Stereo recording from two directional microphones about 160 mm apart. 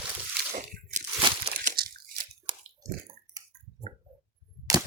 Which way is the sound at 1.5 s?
65° right (ahead or behind).